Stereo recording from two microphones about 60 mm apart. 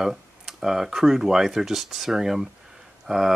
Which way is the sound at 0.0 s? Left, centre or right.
Centre.